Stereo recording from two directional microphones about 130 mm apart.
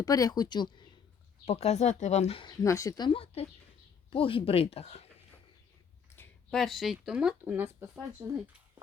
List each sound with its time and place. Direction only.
0.0 s speech: 30° left (ahead or behind)
1.5 s speech: 55° left (ahead or behind)
2.4 s speech: 30° left (ahead or behind)
3.1 s speech: 45° left (ahead or behind)
6.5 s speech: centre (ahead or behind)
7.5 s speech: 15° right (ahead or behind)